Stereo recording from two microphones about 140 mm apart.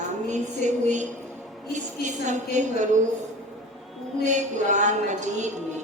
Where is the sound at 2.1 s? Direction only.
60° right (ahead or behind).